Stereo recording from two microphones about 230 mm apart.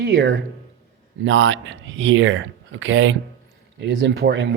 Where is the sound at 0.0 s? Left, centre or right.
Right.